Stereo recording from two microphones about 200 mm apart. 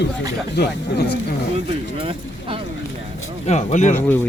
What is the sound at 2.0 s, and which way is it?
Speech, 25° right (ahead or behind).